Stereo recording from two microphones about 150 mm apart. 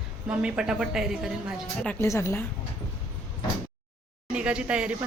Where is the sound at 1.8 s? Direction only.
15° left (ahead or behind).